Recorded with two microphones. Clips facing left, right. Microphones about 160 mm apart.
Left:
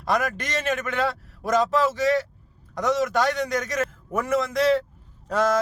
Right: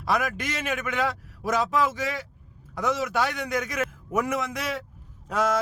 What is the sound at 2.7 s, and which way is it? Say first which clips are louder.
A man's voice: left 3 dB; 40° left (ahead or behind).